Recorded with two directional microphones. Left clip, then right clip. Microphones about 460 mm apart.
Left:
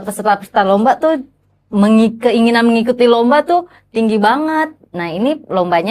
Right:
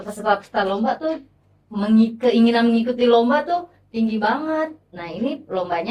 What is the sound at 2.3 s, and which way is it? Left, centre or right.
A woman's voice, left.